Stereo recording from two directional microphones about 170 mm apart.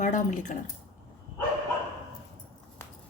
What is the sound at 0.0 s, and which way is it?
Speech, 45° left (ahead or behind).